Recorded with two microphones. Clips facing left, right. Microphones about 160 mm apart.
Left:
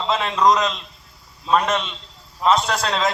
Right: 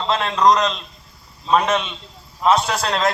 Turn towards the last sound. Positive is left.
turn(degrees=0)  # may be behind; listen again after turning